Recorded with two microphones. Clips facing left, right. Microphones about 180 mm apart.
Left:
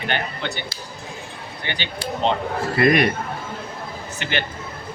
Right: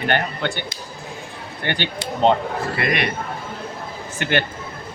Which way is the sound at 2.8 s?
45° left (ahead or behind).